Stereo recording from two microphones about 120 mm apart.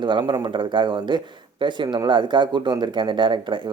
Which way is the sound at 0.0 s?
40° right (ahead or behind).